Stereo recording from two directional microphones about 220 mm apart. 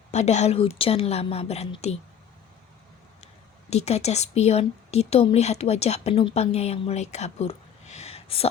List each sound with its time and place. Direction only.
0.1 s speech: 30° left (ahead or behind)
3.7 s speech: 30° left (ahead or behind)